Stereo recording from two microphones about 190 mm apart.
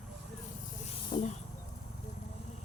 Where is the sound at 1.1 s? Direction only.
40° left (ahead or behind).